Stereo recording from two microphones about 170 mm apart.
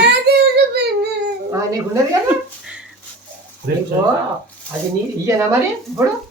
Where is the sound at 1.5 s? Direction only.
20° right (ahead or behind).